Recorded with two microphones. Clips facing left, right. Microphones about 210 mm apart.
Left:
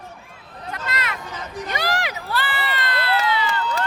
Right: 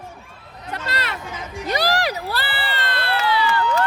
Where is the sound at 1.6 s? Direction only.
35° right (ahead or behind).